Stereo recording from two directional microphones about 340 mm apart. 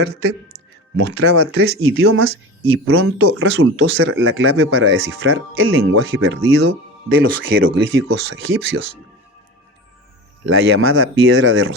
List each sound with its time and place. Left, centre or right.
0.0 s speech: right
10.4 s speech: right